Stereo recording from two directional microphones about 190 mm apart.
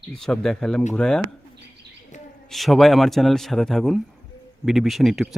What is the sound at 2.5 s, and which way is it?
Speech, centre (ahead or behind).